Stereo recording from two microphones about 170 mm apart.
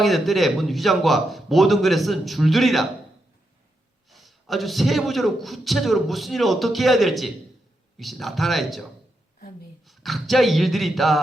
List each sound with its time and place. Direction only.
0.0 s a man's voice: centre (ahead or behind)
4.1 s a man's voice: centre (ahead or behind)